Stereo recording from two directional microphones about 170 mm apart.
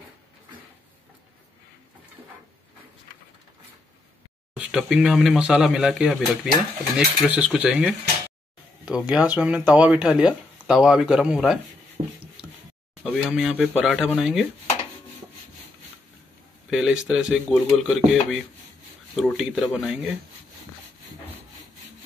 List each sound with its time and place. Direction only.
4.6 s speech: 5° right (ahead or behind)
12.0 s a sound: 35° right (ahead or behind)
13.0 s speech: 5° right (ahead or behind)
16.7 s speech: 5° right (ahead or behind)
19.1 s speech: centre (ahead or behind)